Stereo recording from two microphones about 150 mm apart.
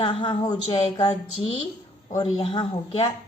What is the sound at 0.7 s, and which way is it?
Speech, 40° left (ahead or behind).